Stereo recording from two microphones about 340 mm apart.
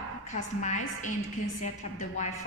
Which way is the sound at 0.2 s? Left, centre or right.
Left.